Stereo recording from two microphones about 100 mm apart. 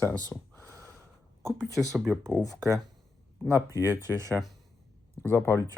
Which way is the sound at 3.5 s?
30° right (ahead or behind).